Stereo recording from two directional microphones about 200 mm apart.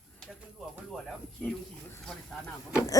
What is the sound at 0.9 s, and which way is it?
Speech, centre (ahead or behind).